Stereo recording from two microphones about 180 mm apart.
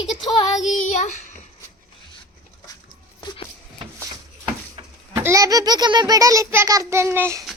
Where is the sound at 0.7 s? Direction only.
45° left (ahead or behind).